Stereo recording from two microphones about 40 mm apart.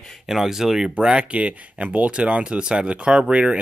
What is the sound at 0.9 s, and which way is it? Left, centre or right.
Speech, right.